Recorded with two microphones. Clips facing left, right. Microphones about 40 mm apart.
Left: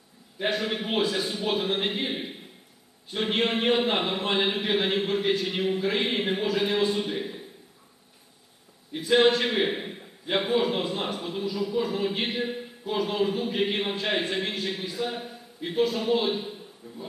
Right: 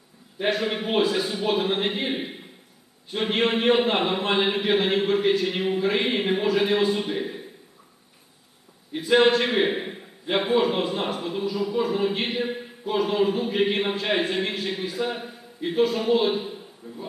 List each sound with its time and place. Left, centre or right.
0.3 s a man's voice: centre
8.9 s a man's voice: centre
16.8 s speech: right